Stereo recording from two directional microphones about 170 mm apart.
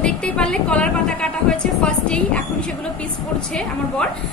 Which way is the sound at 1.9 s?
5° left (ahead or behind).